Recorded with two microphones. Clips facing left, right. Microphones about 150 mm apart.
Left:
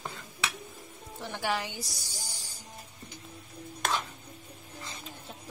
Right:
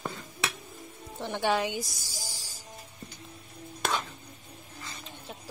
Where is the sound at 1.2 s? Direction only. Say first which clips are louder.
Right 5 dB; 25° right (ahead or behind).